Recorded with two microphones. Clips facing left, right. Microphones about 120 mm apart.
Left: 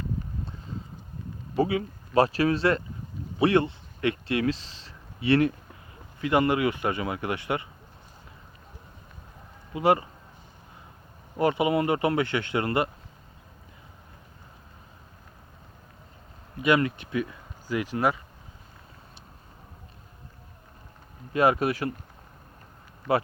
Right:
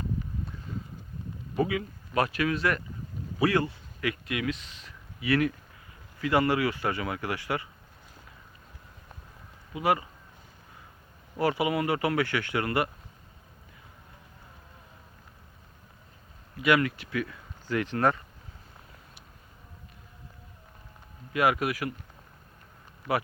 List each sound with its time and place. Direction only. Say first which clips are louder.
1.5 s speech: left 3 dB; 30° left (ahead or behind)
9.7 s speech: left 4 dB; 30° left (ahead or behind)
11.3 s speech: left 3 dB; 25° left (ahead or behind)
16.6 s speech: left 1 dB; 25° left (ahead or behind); by 18.2 s 10° left (ahead or behind)
21.3 s speech: left 3 dB; 30° left (ahead or behind)